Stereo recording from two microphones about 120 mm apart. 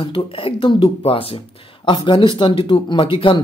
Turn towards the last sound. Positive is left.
turn(degrees=45)  # may be behind; listen again after turning